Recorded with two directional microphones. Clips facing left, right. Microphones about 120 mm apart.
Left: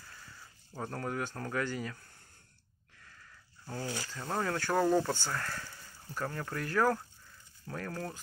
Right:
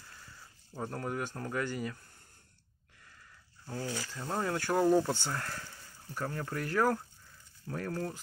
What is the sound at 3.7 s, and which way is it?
Speech, 25° left (ahead or behind).